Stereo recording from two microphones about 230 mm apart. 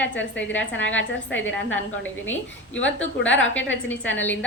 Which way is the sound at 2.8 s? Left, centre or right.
Left.